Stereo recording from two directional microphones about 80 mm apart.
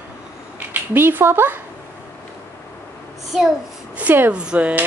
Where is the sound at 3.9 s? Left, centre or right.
Right.